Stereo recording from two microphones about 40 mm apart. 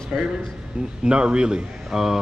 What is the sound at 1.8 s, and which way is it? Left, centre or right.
Speech, centre.